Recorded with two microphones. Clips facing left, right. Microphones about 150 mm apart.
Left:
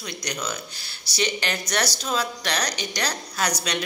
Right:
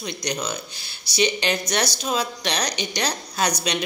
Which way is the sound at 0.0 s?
20° right (ahead or behind).